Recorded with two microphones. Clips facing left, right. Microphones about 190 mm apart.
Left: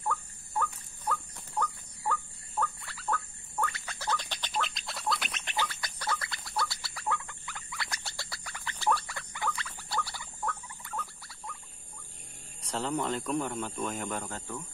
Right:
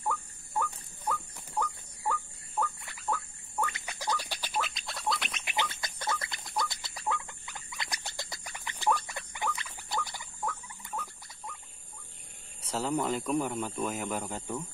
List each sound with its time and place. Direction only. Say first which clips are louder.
0.0 s rodents: even; 10° right (ahead or behind)
3.6 s a sound: even; 20° right (ahead or behind)
5.6 s chicken: even; 20° right (ahead or behind)
10.4 s rodents: even; 10° right (ahead or behind)
12.6 s speech: right 1 dB; 5° right (ahead or behind)